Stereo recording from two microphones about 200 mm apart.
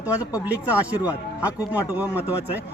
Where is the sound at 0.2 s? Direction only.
15° left (ahead or behind).